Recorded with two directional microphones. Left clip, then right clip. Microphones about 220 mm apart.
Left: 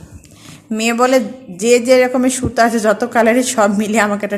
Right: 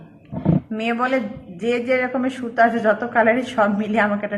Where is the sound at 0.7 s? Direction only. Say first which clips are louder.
Left 10 dB; 50° left (ahead or behind).